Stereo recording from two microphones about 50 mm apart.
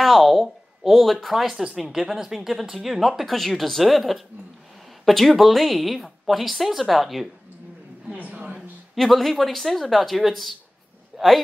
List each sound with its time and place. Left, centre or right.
0.0 s speech: centre
8.2 s a sound: right
8.9 s speech: centre